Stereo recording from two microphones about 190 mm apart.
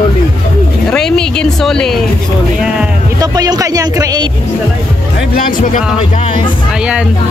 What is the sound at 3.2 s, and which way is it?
Speech, 20° right (ahead or behind).